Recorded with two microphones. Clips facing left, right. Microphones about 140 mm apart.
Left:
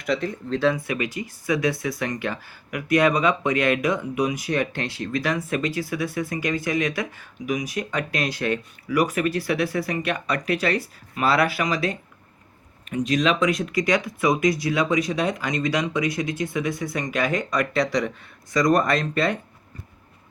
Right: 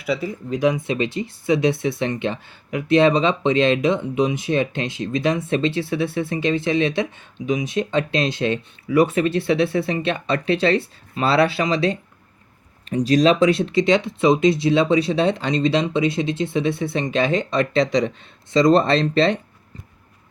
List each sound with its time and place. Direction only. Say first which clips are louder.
0.0 s speech: right 1 dB; 5° right (ahead or behind); by 19.4 s 25° right (ahead or behind)